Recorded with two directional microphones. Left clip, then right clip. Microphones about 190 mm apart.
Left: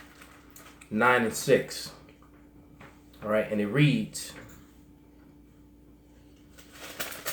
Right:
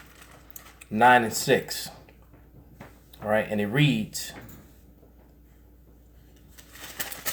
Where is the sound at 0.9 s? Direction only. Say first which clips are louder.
Right 5 dB; 30° right (ahead or behind).